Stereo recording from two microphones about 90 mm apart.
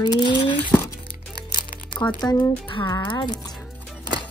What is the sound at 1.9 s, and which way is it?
Speech, 60° left (ahead or behind).